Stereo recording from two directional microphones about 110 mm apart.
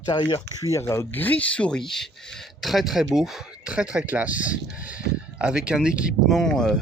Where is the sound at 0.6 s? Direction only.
25° left (ahead or behind).